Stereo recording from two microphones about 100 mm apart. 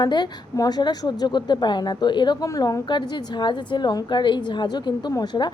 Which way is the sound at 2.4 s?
35° left (ahead or behind).